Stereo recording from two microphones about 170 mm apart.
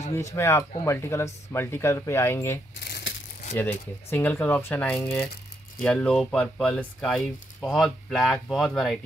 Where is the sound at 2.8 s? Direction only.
70° left (ahead or behind).